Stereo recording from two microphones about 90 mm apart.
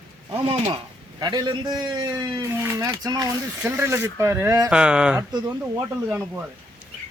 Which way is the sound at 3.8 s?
30° right (ahead or behind).